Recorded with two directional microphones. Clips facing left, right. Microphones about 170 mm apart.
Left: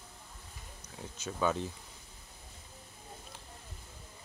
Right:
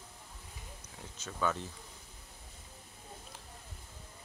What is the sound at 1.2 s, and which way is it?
Speech, 15° left (ahead or behind).